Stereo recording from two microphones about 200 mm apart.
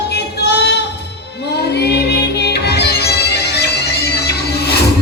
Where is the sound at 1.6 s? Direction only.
55° left (ahead or behind).